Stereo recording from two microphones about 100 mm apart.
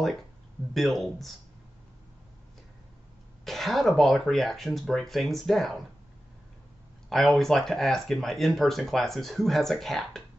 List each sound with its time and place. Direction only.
0.7 s speech: centre (ahead or behind)
3.4 s speech: centre (ahead or behind)
7.1 s speech: 5° left (ahead or behind)